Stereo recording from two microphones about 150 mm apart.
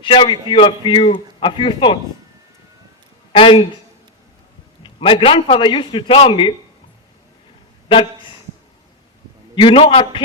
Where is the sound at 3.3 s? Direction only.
35° left (ahead or behind).